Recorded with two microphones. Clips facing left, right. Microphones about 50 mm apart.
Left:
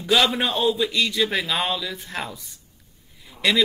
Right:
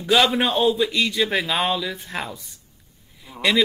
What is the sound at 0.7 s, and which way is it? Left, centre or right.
Speech, right.